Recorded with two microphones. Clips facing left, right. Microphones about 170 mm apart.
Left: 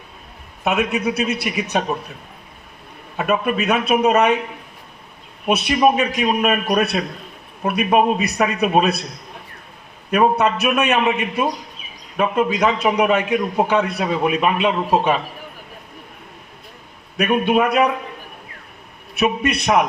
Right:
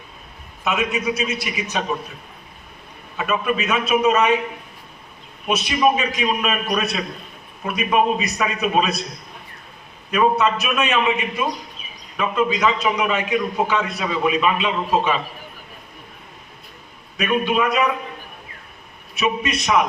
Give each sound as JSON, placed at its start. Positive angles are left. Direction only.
{"t": 0.6, "sound": "a man's voice", "side_deg": 60}
{"t": 3.2, "sound": "a man's voice", "side_deg": 55}
{"t": 5.5, "sound": "a man's voice", "side_deg": 60}
{"t": 10.1, "sound": "a man's voice", "side_deg": 55}
{"t": 17.2, "sound": "a man's voice", "side_deg": 55}
{"t": 19.1, "sound": "a man's voice", "side_deg": 60}